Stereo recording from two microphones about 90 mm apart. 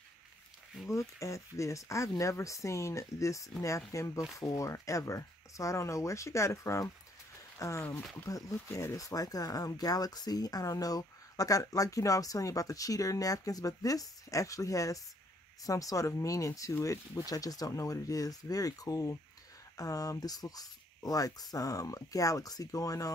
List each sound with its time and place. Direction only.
0.8 s speech: 35° left (ahead or behind)